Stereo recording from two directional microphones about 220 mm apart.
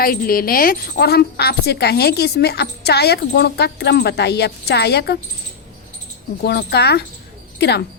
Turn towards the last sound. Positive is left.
turn(degrees=50)  # may be behind; listen again after turning